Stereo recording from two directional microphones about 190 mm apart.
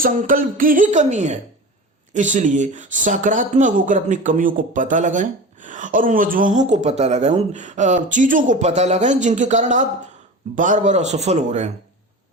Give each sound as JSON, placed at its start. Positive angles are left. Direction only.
{"t": 0.0, "sound": "a woman's voice", "side_deg": -45}